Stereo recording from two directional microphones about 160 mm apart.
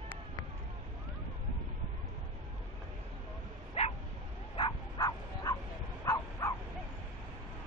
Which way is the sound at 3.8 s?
45° left (ahead or behind).